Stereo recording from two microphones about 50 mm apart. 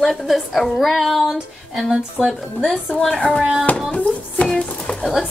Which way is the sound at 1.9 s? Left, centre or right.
Centre.